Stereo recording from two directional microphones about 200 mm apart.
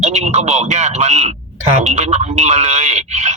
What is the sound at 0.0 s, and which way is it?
Speech, 35° right (ahead or behind).